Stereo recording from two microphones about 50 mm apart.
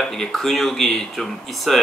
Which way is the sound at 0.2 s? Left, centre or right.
Centre.